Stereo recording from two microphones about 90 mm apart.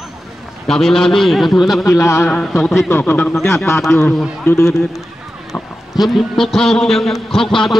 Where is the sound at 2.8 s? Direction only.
20° left (ahead or behind).